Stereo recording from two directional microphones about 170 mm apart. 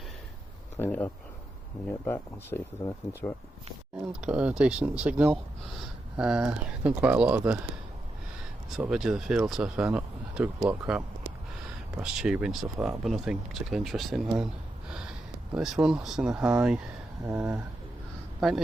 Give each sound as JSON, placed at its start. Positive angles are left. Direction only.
{"t": 0.8, "sound": "speech", "side_deg": 10}
{"t": 4.1, "sound": "speech", "side_deg": -5}
{"t": 8.7, "sound": "speech", "side_deg": -5}
{"t": 14.8, "sound": "gasp", "side_deg": -5}
{"t": 15.5, "sound": "speech", "side_deg": -5}
{"t": 18.3, "sound": "speech", "side_deg": 0}